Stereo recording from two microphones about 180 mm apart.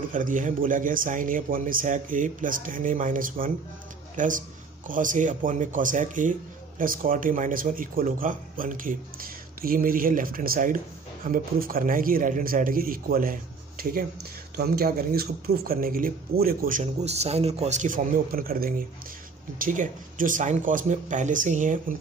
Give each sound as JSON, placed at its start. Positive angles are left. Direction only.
{"t": 0.1, "sound": "speech", "side_deg": -45}